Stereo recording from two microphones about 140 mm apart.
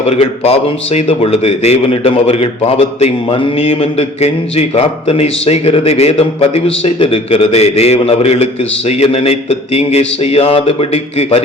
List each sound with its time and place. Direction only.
0.1 s a man's voice: 45° left (ahead or behind)